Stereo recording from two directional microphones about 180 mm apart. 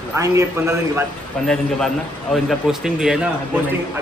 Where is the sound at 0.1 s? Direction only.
15° right (ahead or behind).